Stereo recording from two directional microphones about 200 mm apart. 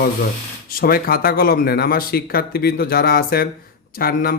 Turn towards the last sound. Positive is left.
turn(degrees=50)  # may be behind; listen again after turning